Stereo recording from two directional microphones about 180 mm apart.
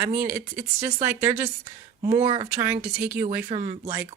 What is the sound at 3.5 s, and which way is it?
Speech, 30° right (ahead or behind).